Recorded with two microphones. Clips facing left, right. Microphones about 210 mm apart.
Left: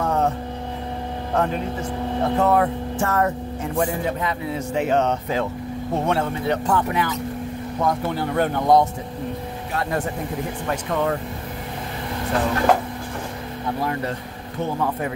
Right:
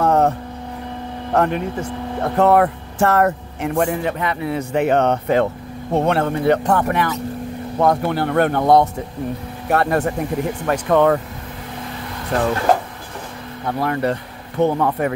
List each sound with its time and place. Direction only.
0.0 s vehicle: 55° right (ahead or behind)
1.3 s speech: 65° right (ahead or behind)
10.7 s speech: 75° right (ahead or behind)
13.7 s speech: 65° right (ahead or behind)